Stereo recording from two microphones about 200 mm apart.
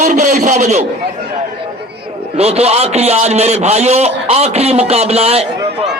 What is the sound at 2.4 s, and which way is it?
A man's voice, 30° right (ahead or behind).